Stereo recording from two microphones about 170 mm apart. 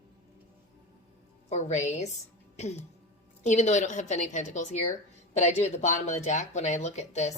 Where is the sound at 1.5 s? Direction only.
40° left (ahead or behind).